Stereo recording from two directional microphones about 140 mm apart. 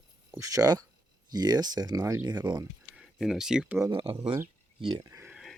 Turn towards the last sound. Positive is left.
turn(degrees=-20)  # may be behind; listen again after turning